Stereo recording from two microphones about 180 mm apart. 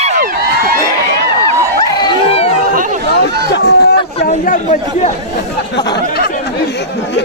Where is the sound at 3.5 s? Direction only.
65° left (ahead or behind).